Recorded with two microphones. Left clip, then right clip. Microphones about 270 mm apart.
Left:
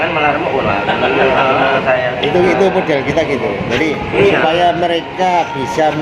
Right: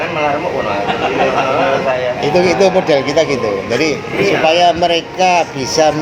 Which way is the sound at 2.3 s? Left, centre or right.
Right.